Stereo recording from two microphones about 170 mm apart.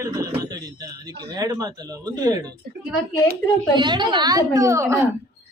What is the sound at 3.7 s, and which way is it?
A woman's voice, 25° right (ahead or behind).